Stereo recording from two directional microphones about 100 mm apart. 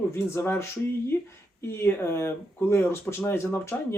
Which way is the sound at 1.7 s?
25° left (ahead or behind).